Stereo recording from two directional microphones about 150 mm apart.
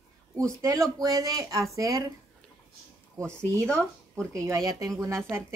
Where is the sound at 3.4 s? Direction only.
20° right (ahead or behind).